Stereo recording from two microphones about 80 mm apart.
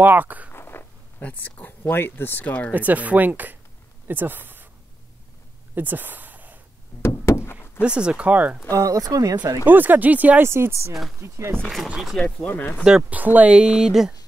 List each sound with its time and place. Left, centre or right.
0.0 s speech: right
0.5 s a sound: left
1.2 s speech: left
2.7 s speech: right
5.8 s a sound: right
7.0 s door: left
7.8 s speech: centre
8.7 s speech: right
9.7 s speech: right
10.5 s speech: right
13.1 s speech: centre